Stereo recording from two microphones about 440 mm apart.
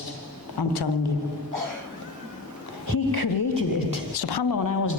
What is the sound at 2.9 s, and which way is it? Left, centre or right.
A woman's voice, left.